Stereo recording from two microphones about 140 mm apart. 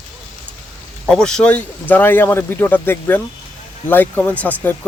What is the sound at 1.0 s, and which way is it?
A man's voice, 5° left (ahead or behind).